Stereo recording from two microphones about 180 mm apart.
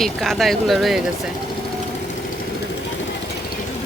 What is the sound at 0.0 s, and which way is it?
Speech, centre (ahead or behind).